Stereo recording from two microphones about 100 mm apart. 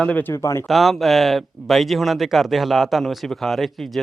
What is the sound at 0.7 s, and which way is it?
Speech, centre (ahead or behind).